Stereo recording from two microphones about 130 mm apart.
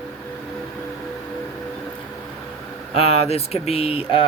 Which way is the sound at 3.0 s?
55° left (ahead or behind).